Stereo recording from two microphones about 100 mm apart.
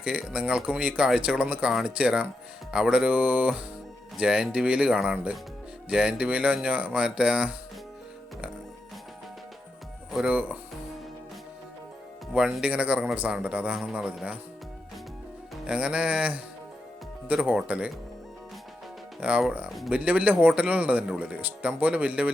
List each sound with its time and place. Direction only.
0.0 s speech: 10° right (ahead or behind)
10.1 s music: 5° right (ahead or behind)
10.3 s speech: 15° right (ahead or behind)
12.3 s a man's voice: 10° right (ahead or behind)
15.6 s speech: 10° right (ahead or behind)
19.2 s speech: 10° right (ahead or behind)